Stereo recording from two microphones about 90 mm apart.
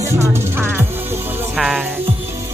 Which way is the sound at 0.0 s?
30° right (ahead or behind).